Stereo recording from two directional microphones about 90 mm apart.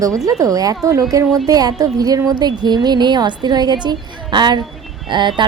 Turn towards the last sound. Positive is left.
turn(degrees=-60)  # may be behind; listen again after turning